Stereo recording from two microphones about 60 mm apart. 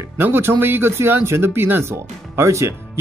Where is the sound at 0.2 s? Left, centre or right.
Right.